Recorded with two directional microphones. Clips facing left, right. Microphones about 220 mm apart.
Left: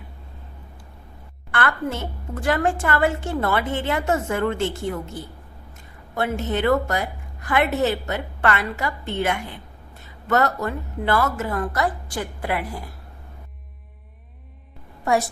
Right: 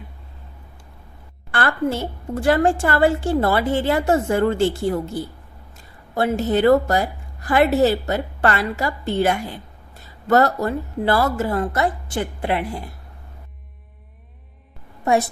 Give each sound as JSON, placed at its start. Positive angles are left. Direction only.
{"t": 1.5, "sound": "a woman's voice", "side_deg": -30}